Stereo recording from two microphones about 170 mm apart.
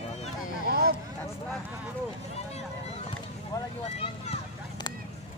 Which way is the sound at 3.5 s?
20° left (ahead or behind).